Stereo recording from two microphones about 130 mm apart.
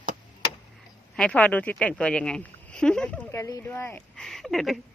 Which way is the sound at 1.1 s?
10° left (ahead or behind).